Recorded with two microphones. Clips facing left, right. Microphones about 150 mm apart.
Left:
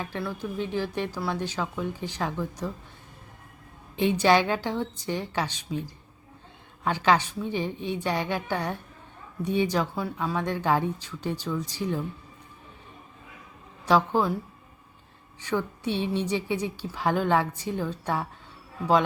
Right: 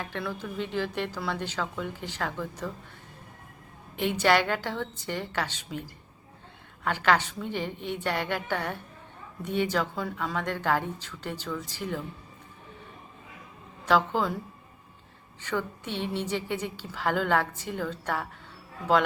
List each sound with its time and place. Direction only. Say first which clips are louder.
0.0 s a woman's voice: left 2 dB; 5° left (ahead or behind)
4.0 s a woman's voice: left 3 dB; 15° left (ahead or behind)
13.8 s a woman's voice: left 2 dB; 15° left (ahead or behind)
15.4 s a woman's voice: left 3 dB; 10° left (ahead or behind)